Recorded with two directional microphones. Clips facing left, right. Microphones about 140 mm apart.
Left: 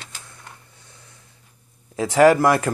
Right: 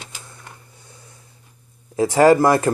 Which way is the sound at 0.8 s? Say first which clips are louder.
Right 5 dB; 10° right (ahead or behind).